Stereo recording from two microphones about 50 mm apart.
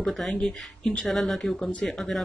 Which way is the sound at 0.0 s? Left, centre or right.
Centre.